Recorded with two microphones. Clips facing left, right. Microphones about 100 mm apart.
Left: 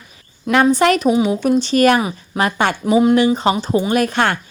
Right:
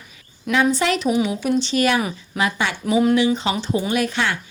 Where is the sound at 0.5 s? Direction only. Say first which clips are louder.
Left 5 dB; 55° left (ahead or behind).